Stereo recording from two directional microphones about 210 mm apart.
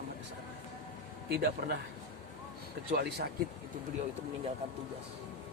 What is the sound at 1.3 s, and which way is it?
Speech, 50° right (ahead or behind).